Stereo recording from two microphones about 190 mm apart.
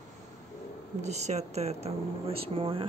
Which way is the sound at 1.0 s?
35° right (ahead or behind).